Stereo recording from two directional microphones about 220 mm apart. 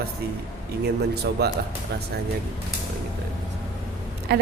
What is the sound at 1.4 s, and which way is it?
Speech, 45° right (ahead or behind).